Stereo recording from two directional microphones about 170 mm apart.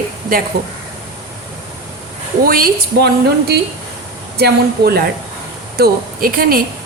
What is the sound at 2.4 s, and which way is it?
A woman's voice, 60° right (ahead or behind).